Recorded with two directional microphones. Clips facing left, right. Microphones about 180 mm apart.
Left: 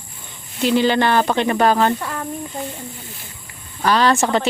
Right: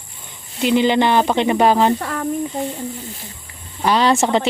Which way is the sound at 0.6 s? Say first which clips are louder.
Right 1 dB; 15° right (ahead or behind).